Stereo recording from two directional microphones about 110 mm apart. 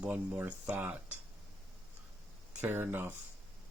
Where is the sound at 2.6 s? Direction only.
20° right (ahead or behind).